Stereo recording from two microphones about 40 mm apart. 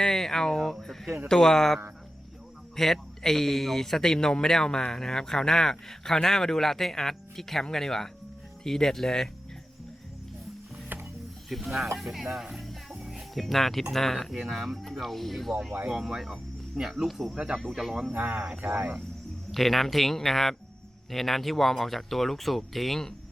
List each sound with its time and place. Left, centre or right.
0.0 s speech: centre
11.4 s speech: centre
15.9 s speech: centre
17.3 s speech: centre
17.7 s speech: centre
18.1 s speech: right
19.5 s speech: centre